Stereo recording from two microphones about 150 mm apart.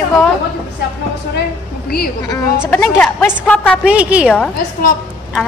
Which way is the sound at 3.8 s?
10° right (ahead or behind).